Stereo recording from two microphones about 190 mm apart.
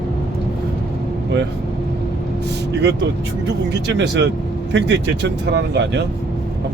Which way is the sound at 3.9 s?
60° right (ahead or behind).